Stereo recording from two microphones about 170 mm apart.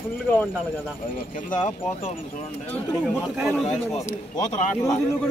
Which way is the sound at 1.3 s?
50° left (ahead or behind).